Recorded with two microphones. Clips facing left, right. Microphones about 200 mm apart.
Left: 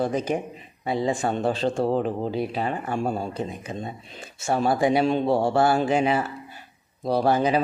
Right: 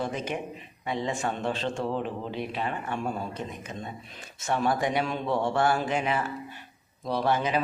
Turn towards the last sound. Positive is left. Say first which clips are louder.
# left 6 dB
turn(degrees=35)  # may be behind; listen again after turning